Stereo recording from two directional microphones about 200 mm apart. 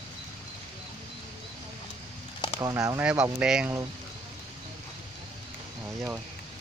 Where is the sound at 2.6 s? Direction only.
15° right (ahead or behind).